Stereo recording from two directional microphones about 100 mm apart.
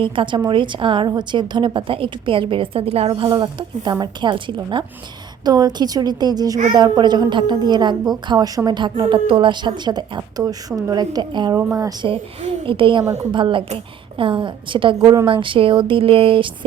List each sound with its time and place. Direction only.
0.0 s a woman's voice: 55° right (ahead or behind)
5.5 s a woman's voice: 40° right (ahead or behind)
11.5 s a woman's voice: 30° right (ahead or behind)
12.0 s a woman's voice: 75° right (ahead or behind); by 14.9 s 55° right (ahead or behind)
14.9 s a woman's voice: 40° right (ahead or behind)
15.3 s a woman's voice: 60° right (ahead or behind)